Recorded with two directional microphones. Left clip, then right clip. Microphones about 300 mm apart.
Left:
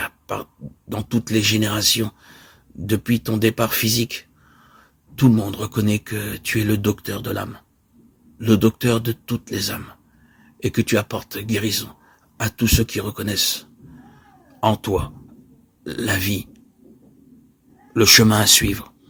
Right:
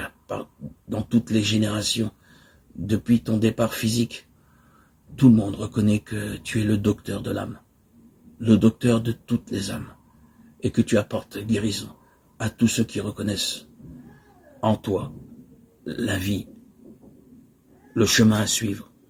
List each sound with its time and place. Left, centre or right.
0.0 s pig: left
0.9 s speech: left
17.9 s speech: left